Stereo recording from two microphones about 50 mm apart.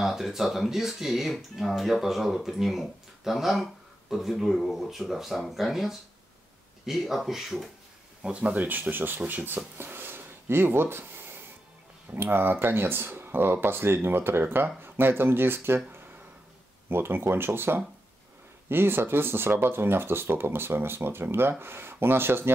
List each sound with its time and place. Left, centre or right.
0.0 s speech: centre
8.2 s speech: right
8.6 s speech: right
9.8 s a sound: right
12.1 s speech: right